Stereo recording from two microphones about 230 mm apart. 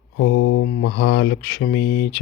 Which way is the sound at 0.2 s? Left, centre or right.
Left.